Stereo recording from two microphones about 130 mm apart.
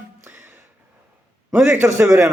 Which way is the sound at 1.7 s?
20° right (ahead or behind).